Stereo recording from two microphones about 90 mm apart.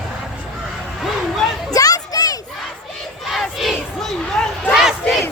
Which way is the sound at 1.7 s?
40° left (ahead or behind).